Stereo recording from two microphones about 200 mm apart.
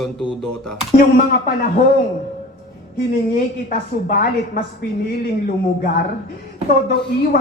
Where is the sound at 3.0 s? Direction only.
45° left (ahead or behind).